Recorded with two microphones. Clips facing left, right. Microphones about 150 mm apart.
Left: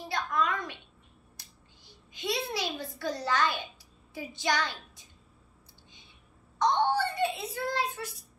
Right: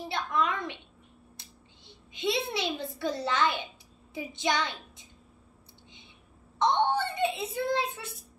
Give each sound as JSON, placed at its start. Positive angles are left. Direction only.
{"t": 0.1, "sound": "a woman's voice", "side_deg": -25}
{"t": 6.6, "sound": "a child's voice", "side_deg": -25}